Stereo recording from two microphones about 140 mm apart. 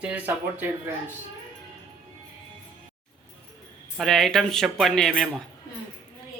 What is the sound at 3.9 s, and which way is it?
Speech, centre (ahead or behind).